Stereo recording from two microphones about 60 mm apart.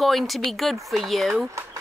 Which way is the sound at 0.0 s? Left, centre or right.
Centre.